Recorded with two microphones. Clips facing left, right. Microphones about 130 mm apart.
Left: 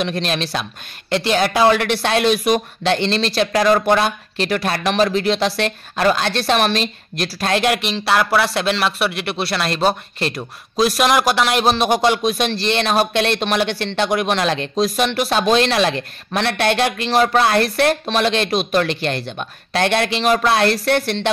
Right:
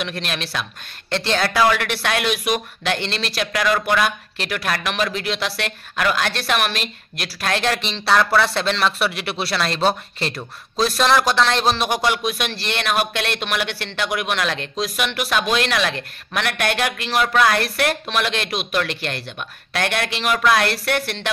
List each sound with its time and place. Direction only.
0.0 s speech: 25° left (ahead or behind)
1.1 s speech: 15° left (ahead or behind)
7.8 s speech: 5° left (ahead or behind); by 21.3 s 30° left (ahead or behind)